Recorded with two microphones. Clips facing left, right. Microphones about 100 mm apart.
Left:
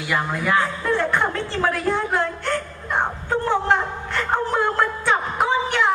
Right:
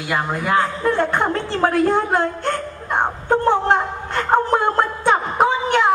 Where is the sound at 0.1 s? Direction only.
40° right (ahead or behind).